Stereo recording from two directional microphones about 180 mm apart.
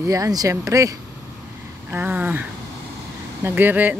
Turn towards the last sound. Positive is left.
turn(degrees=-10)  # may be behind; listen again after turning